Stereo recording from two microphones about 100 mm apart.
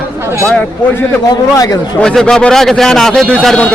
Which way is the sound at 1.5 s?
35° left (ahead or behind).